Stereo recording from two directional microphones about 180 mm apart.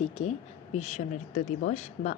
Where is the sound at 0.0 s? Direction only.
35° left (ahead or behind).